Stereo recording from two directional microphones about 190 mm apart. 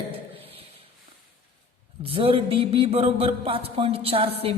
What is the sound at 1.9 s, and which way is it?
A man's voice, 30° right (ahead or behind).